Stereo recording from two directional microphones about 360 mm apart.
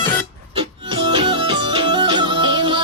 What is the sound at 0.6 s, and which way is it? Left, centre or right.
Music, centre.